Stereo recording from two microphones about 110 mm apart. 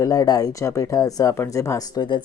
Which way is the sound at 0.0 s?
35° left (ahead or behind).